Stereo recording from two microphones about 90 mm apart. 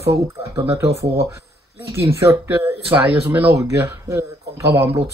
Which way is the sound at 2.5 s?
20° right (ahead or behind).